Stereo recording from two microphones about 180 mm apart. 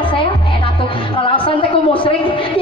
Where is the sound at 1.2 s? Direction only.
30° left (ahead or behind).